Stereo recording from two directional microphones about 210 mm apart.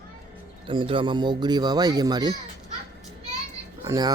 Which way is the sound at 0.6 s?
25° right (ahead or behind).